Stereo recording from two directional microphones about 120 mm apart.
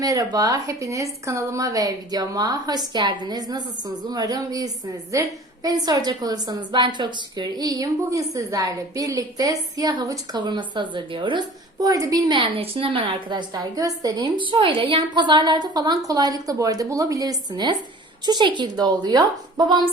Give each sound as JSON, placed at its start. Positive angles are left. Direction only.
{"t": 0.0, "sound": "a woman's voice", "side_deg": -30}
{"t": 12.3, "sound": "a woman's voice", "side_deg": -45}